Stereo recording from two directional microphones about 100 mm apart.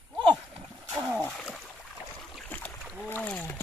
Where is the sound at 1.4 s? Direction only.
5° left (ahead or behind).